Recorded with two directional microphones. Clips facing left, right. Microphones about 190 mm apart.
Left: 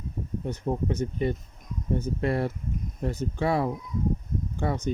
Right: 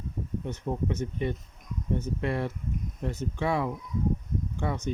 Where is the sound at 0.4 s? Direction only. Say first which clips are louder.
Left 3 dB; 35° left (ahead or behind).